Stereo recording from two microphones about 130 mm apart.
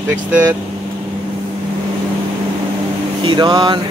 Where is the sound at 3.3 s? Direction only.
35° right (ahead or behind).